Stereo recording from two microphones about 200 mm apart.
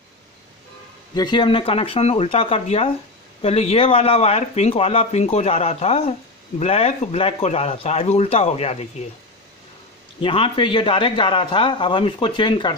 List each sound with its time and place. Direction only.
1.1 s speech: 20° left (ahead or behind)
10.2 s speech: 25° left (ahead or behind)